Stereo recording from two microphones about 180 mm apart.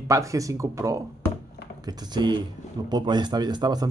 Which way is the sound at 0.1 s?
15° right (ahead or behind).